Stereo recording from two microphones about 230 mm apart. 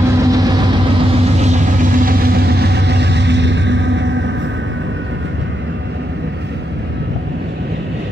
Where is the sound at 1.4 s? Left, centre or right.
Right.